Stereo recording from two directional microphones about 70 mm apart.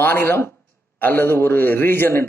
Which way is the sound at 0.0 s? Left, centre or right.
Left.